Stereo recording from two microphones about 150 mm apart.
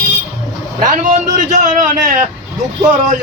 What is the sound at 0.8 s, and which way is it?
Speech, 55° right (ahead or behind).